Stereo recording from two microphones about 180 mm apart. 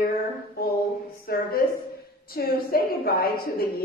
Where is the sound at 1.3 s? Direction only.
60° left (ahead or behind).